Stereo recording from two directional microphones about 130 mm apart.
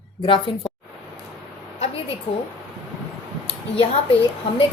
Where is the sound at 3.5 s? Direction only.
45° left (ahead or behind).